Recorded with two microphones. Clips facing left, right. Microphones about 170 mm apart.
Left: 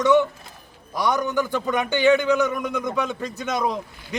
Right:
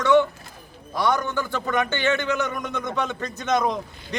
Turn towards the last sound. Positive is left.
turn(degrees=5)  # may be behind; listen again after turning